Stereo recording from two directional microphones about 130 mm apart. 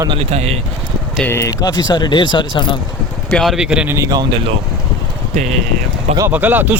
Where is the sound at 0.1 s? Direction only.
55° right (ahead or behind).